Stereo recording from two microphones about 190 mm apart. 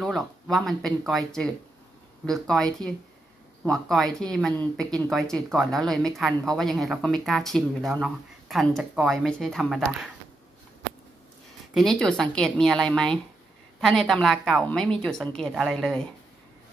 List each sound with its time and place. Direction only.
0.0 s speech: centre (ahead or behind)
11.7 s speech: centre (ahead or behind)